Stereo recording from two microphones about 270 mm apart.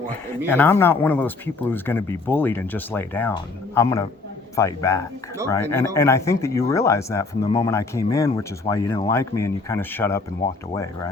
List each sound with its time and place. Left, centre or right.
0.5 s speech: centre